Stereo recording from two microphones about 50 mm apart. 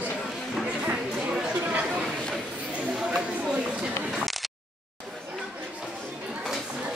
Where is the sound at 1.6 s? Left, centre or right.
Right.